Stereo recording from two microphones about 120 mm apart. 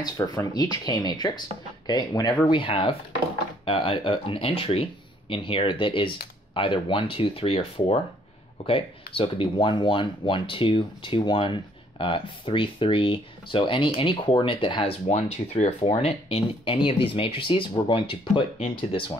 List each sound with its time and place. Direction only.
0.0 s speech: 35° left (ahead or behind)
2.5 s speech: 45° left (ahead or behind)
15.0 s speech: 65° left (ahead or behind); by 19.1 s 45° left (ahead or behind)